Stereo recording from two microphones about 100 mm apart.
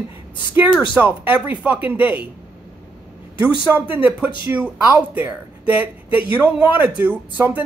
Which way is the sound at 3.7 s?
20° right (ahead or behind).